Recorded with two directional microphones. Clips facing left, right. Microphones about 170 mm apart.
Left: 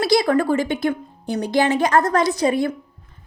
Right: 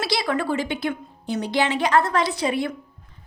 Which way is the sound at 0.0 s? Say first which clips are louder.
Left 7 dB; 45° left (ahead or behind).